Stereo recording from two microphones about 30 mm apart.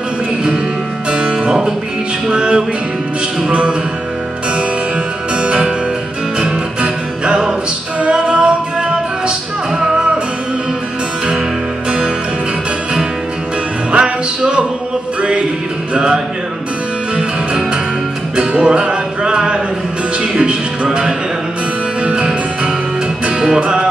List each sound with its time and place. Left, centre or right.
1.1 s music: right
5.4 s music: right
13.9 s music: right
15.9 s music: right
18.3 s music: right
23.4 s music: right